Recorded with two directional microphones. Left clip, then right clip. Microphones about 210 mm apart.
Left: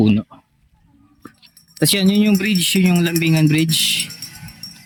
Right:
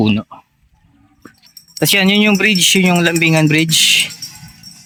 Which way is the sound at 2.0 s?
15° right (ahead or behind).